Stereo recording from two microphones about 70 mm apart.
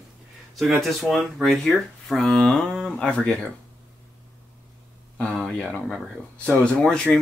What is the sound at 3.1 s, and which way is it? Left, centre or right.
Speech, centre.